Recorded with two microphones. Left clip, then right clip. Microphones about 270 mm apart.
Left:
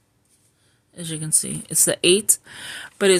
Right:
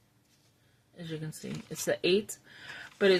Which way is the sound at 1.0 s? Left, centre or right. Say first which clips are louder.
Left 13 dB; left.